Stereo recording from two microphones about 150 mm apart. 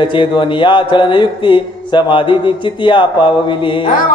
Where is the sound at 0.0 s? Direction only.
35° left (ahead or behind).